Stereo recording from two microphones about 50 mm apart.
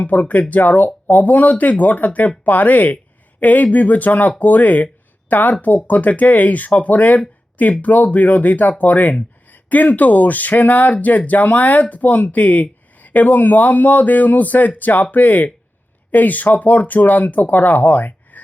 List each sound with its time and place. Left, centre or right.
0.0 s speech: left